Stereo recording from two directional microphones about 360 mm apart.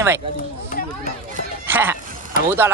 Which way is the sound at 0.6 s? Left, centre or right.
Left.